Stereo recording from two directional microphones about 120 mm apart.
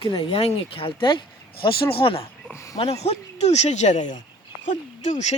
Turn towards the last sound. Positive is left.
turn(degrees=80)